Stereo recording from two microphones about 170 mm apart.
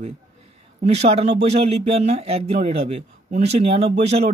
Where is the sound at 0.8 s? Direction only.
40° right (ahead or behind).